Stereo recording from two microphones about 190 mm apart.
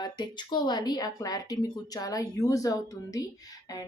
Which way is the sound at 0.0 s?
25° left (ahead or behind).